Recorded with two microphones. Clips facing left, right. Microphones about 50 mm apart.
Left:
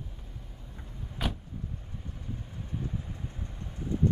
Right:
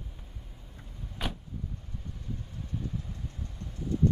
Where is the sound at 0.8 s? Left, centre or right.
Centre.